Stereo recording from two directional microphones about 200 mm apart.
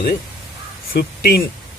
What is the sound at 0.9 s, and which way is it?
Speech, 50° left (ahead or behind).